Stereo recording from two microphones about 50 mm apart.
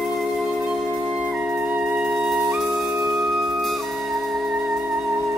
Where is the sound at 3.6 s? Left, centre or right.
Centre.